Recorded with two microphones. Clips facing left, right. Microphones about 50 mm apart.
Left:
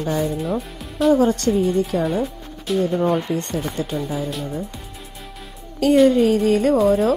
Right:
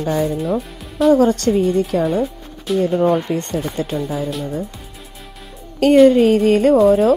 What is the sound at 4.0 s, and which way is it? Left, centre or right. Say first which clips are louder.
Music: right 3 dB; centre.